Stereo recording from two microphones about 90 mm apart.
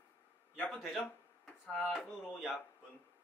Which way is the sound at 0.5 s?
15° left (ahead or behind).